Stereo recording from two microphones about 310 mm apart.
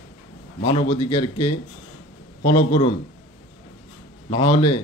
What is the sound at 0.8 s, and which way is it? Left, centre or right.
Speech, centre.